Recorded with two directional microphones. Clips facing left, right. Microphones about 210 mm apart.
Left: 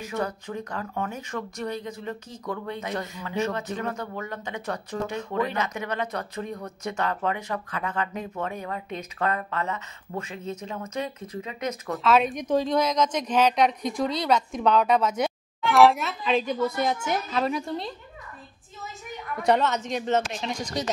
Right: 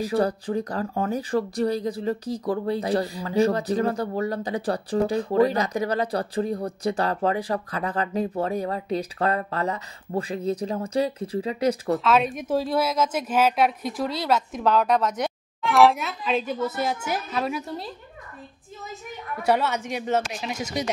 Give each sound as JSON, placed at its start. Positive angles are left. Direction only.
{"t": 0.0, "sound": "speech", "side_deg": -35}
{"t": 12.0, "sound": "speech", "side_deg": 0}
{"t": 19.4, "sound": "speech", "side_deg": -10}